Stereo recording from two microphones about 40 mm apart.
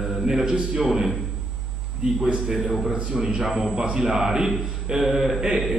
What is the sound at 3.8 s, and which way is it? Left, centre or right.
A man's voice, centre.